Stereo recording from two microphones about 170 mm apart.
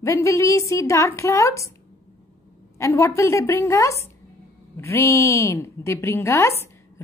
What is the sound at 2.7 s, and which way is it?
A woman's voice, 15° left (ahead or behind).